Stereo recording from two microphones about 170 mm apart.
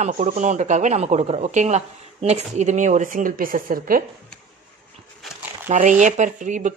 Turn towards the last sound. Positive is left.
turn(degrees=-45)  # may be behind; listen again after turning